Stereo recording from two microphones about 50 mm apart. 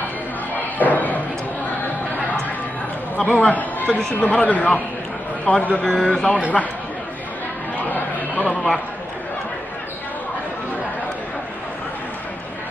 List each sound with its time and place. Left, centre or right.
0.7 s a sound: left
3.2 s speech: left
5.9 s speech: centre
7.7 s music: left